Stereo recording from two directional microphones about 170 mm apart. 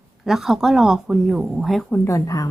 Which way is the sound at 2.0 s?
20° left (ahead or behind).